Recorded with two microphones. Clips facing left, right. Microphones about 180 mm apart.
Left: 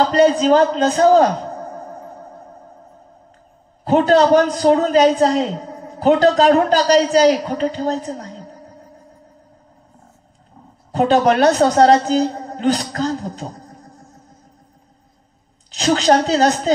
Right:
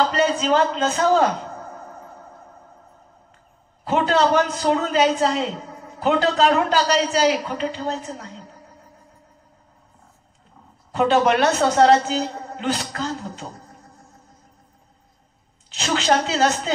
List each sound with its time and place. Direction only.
0.0 s a man's voice: 35° left (ahead or behind)
3.8 s a man's voice: 35° left (ahead or behind)
10.9 s a man's voice: 35° left (ahead or behind)
15.7 s a man's voice: 35° left (ahead or behind)